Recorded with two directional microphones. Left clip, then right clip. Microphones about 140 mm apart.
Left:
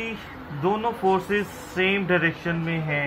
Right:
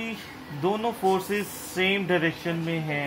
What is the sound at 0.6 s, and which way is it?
Speech, 55° right (ahead or behind).